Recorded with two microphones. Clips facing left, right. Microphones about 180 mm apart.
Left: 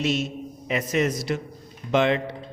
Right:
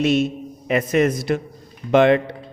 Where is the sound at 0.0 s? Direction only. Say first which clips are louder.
Right 7 dB; 55° right (ahead or behind).